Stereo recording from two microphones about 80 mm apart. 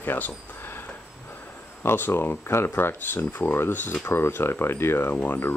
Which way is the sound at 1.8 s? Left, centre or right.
Left.